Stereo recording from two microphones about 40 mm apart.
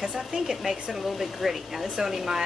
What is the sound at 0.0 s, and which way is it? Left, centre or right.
Speech, centre.